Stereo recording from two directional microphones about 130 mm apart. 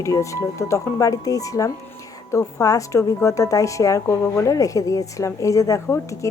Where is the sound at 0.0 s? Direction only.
25° left (ahead or behind).